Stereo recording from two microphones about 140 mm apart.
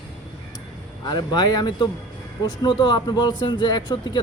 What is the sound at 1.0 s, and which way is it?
Speech, 30° left (ahead or behind).